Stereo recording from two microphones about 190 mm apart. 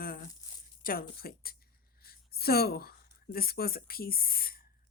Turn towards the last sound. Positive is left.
turn(degrees=50)  # may be behind; listen again after turning